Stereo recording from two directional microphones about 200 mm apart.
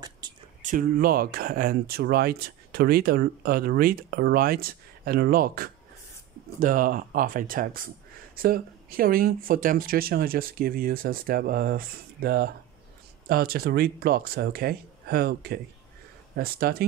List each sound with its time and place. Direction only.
0.2 s whispering: 20° right (ahead or behind)
0.6 s speech: 40° right (ahead or behind)